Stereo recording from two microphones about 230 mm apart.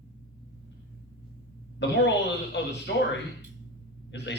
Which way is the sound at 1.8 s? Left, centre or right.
Left.